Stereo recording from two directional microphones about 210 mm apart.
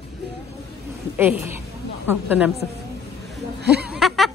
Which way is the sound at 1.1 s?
10° right (ahead or behind).